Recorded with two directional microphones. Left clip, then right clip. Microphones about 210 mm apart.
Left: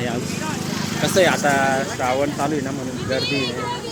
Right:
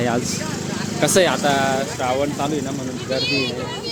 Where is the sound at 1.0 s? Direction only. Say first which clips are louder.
Right 4 dB; 55° right (ahead or behind).